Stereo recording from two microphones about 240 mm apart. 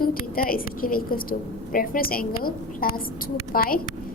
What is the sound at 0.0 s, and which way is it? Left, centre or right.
A woman's voice, left.